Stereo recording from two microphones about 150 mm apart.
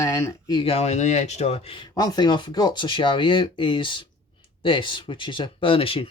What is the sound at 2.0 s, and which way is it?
Speech, 30° left (ahead or behind).